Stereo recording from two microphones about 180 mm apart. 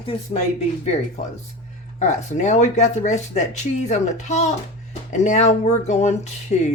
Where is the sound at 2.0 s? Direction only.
40° left (ahead or behind).